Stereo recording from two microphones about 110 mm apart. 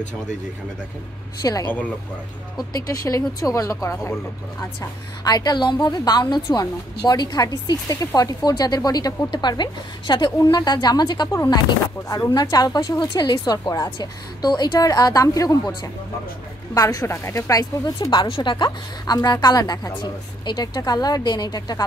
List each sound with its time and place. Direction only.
1.4 s speech: 35° left (ahead or behind)
2.7 s speech: 30° left (ahead or behind)
5.2 s speech: 35° left (ahead or behind)
16.7 s speech: 30° left (ahead or behind)